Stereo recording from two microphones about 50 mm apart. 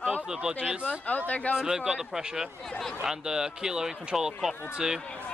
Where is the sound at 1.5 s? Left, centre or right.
Centre.